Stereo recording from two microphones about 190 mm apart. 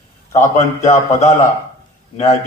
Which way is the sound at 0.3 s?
35° left (ahead or behind).